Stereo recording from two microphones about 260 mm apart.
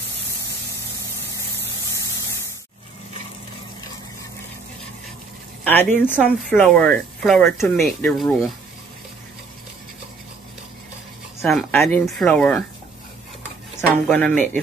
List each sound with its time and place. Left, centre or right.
5.6 s a sound: centre
5.9 s speech: centre
11.4 s speech: centre
14.0 s speech: centre
14.3 s speech: right